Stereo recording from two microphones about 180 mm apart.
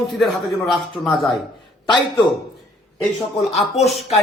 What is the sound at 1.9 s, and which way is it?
Speech, 25° left (ahead or behind).